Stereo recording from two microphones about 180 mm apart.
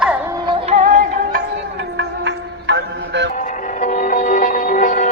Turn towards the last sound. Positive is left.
turn(degrees=45)  # may be behind; listen again after turning